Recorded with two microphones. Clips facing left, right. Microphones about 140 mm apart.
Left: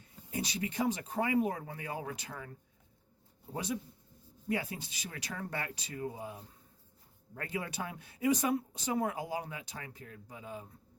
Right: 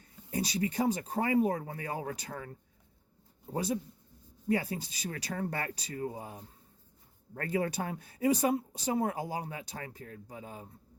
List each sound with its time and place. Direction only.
0.3 s speech: 40° right (ahead or behind)
3.5 s speech: 35° right (ahead or behind)